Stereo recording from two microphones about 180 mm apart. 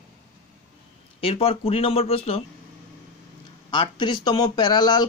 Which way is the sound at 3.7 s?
25° left (ahead or behind).